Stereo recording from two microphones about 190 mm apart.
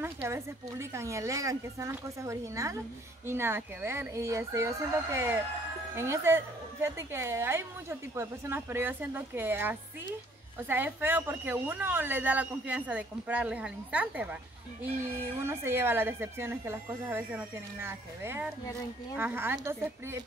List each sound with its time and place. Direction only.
0.0 s a woman's voice: 15° right (ahead or behind)